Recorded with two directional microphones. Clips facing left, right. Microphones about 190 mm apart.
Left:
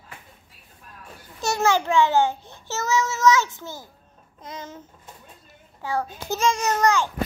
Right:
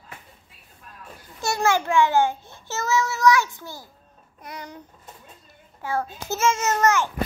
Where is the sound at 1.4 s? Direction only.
20° left (ahead or behind).